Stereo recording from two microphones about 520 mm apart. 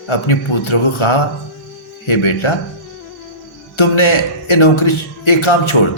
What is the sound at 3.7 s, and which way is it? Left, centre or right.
A man's voice, left.